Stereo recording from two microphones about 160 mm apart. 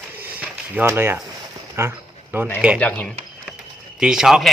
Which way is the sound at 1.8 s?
15° right (ahead or behind).